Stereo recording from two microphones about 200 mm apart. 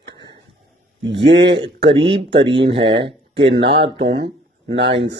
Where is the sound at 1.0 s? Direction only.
60° right (ahead or behind).